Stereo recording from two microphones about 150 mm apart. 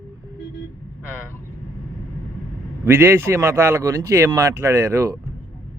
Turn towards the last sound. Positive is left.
turn(degrees=-20)  # may be behind; listen again after turning